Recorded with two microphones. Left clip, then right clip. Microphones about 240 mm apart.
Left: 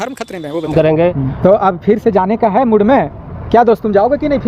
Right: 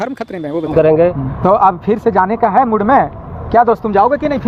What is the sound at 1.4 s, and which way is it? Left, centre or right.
Speech, left.